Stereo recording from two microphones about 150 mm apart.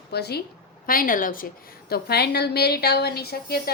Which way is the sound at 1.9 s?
90° left.